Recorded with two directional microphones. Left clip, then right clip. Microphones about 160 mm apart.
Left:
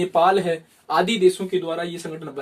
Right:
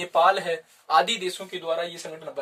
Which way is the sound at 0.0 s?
35° right (ahead or behind).